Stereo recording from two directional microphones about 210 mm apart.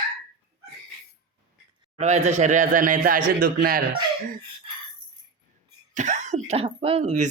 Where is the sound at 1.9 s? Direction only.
30° right (ahead or behind).